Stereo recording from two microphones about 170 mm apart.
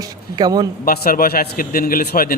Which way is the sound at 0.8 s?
60° left (ahead or behind).